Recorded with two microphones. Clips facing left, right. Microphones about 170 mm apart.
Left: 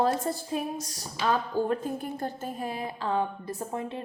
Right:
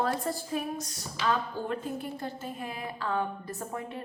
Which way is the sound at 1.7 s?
45° left (ahead or behind).